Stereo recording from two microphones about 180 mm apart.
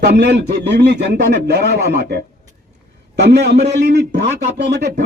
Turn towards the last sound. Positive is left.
turn(degrees=-70)  # may be behind; listen again after turning